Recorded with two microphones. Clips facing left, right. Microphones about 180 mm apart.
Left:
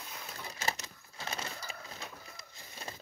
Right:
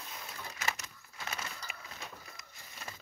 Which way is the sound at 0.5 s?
30° left (ahead or behind).